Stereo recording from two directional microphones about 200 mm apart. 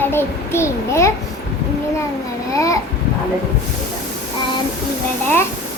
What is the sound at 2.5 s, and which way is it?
Speech, 15° left (ahead or behind).